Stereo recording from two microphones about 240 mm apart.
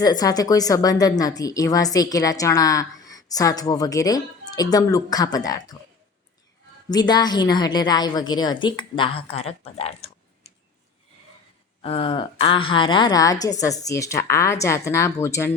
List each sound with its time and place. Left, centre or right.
0.0 s a woman's voice: centre
6.9 s a woman's voice: centre
11.8 s a woman's voice: left